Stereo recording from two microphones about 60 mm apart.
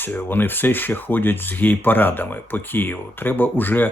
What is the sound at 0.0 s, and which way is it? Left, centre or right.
Speech, left.